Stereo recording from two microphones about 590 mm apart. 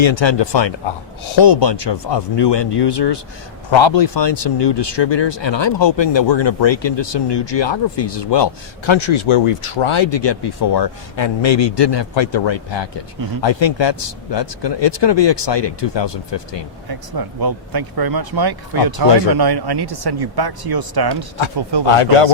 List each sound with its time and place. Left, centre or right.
0.0 s speech: left
16.9 s speech: right
21.8 s speech: left